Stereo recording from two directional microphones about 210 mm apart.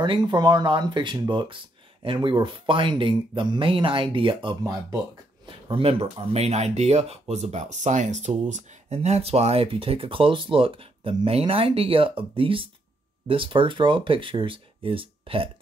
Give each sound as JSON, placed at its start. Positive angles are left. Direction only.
{"t": 0.0, "sound": "speech", "side_deg": -20}